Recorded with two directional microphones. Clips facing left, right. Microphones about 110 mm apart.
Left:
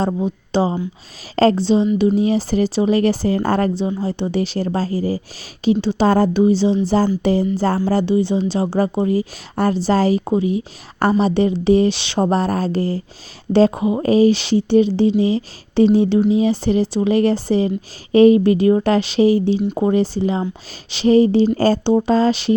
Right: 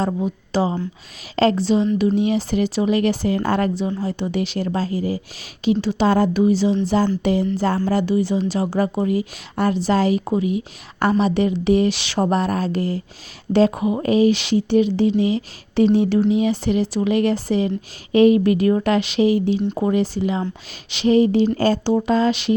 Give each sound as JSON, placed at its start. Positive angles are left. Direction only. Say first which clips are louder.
{"t": 0.3, "sound": "speech", "louder": "left 2 dB", "side_deg": 30}
{"t": 3.8, "sound": "speech", "louder": "left 2 dB", "side_deg": 25}